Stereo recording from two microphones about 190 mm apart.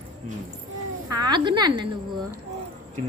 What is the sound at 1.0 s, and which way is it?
Speech, 20° right (ahead or behind).